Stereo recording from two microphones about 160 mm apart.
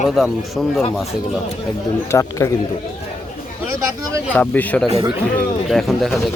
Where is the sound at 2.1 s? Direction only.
20° left (ahead or behind).